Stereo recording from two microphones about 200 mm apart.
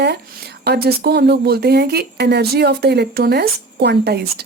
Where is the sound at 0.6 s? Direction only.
50° right (ahead or behind).